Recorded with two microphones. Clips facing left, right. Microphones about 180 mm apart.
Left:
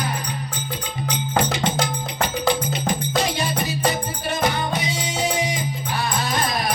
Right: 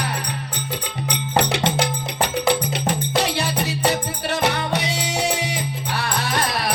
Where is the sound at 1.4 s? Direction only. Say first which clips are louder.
Right 2 dB; 70° right (ahead or behind).